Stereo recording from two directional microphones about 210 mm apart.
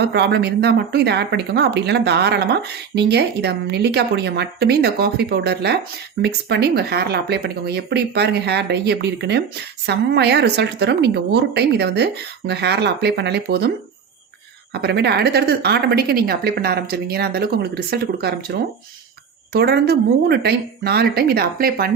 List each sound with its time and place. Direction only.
0.0 s speech: 55° right (ahead or behind)
14.7 s speech: 50° right (ahead or behind)